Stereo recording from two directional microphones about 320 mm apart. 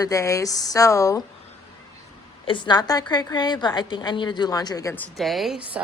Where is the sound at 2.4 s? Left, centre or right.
Centre.